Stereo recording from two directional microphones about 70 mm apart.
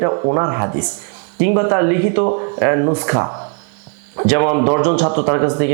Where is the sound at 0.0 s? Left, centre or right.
Right.